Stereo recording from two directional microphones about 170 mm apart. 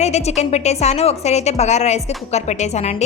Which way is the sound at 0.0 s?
40° left (ahead or behind).